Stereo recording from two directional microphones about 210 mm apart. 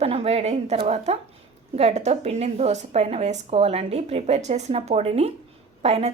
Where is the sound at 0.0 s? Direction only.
30° right (ahead or behind).